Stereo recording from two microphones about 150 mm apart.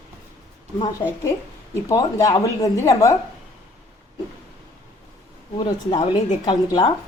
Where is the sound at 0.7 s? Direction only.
30° left (ahead or behind).